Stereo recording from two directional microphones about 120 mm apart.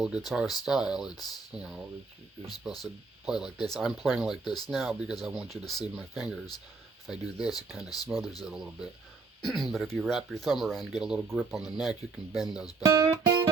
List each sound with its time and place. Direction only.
0.0 s speech: centre (ahead or behind)
3.2 s speech: 5° right (ahead or behind)
8.1 s speech: 15° right (ahead or behind)
8.4 s speech: 5° right (ahead or behind)
12.8 s speech: 30° right (ahead or behind)